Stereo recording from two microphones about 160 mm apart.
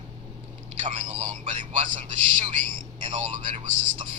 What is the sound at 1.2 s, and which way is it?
A man's voice, 45° right (ahead or behind).